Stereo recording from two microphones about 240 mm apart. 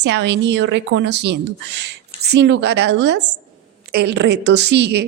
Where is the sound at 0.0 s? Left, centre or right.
Right.